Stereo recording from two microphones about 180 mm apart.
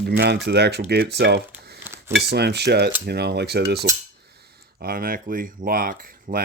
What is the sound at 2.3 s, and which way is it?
Speech, 65° right (ahead or behind).